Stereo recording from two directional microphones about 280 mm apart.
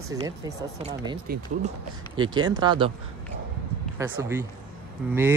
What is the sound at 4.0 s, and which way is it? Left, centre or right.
Speech, centre.